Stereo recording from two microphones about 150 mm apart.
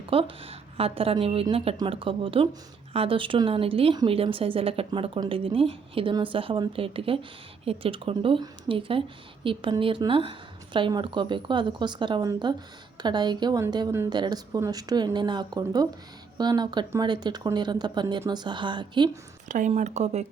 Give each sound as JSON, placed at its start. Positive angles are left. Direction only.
{"t": 0.1, "sound": "a woman's voice", "side_deg": -40}
{"t": 19.5, "sound": "speech", "side_deg": -55}